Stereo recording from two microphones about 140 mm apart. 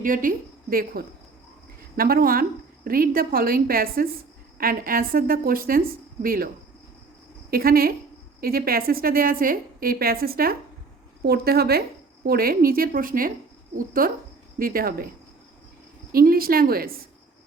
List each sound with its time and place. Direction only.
0.0 s a woman's voice: 75° right (ahead or behind)
7.5 s a woman's voice: 90° right
16.1 s a woman's voice: 90° right